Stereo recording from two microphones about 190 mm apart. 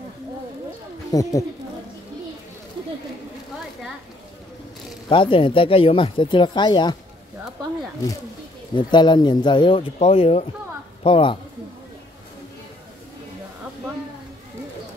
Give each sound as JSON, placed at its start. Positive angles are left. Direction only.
{"t": 1.1, "sound": "speech", "side_deg": 20}
{"t": 5.1, "sound": "speech", "side_deg": 25}
{"t": 8.7, "sound": "speech", "side_deg": 25}